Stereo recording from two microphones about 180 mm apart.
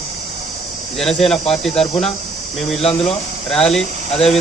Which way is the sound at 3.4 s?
Centre (ahead or behind).